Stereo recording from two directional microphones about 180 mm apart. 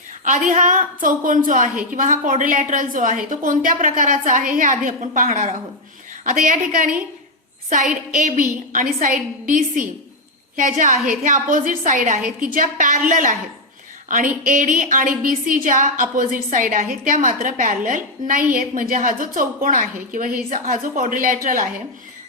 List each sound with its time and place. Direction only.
0.3 s a woman's voice: 45° right (ahead or behind)
10.6 s a woman's voice: 45° right (ahead or behind)
14.4 s a woman's voice: 45° right (ahead or behind)